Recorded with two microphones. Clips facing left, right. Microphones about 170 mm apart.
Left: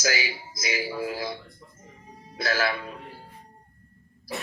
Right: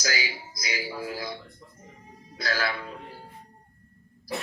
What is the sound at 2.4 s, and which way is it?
Speech, 20° left (ahead or behind).